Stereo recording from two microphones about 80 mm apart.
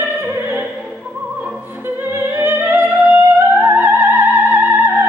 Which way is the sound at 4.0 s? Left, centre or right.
Right.